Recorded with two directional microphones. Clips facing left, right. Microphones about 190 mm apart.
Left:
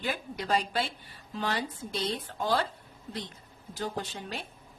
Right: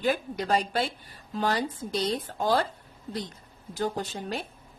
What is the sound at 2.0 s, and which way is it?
Speech, 40° right (ahead or behind).